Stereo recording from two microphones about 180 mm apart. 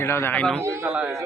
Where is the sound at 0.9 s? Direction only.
5° right (ahead or behind).